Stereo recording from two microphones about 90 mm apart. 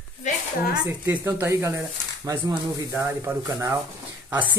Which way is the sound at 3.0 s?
30° right (ahead or behind).